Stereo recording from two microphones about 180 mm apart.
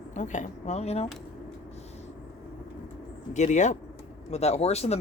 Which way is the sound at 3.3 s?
40° left (ahead or behind).